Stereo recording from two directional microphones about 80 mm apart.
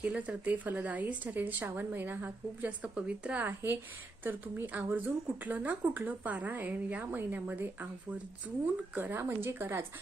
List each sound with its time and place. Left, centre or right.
0.0 s speech: centre
9.0 s speech: right